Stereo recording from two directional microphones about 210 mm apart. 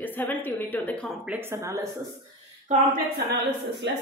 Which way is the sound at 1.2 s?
10° right (ahead or behind).